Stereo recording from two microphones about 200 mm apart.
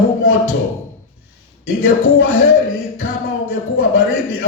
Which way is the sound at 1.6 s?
90° left.